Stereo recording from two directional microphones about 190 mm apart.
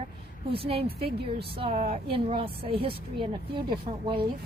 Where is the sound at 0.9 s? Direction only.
55° right (ahead or behind).